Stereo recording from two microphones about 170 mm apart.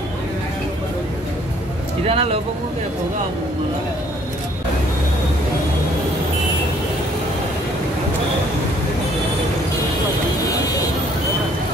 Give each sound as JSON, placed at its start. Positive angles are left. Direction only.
{"t": 2.0, "sound": "speech", "side_deg": -35}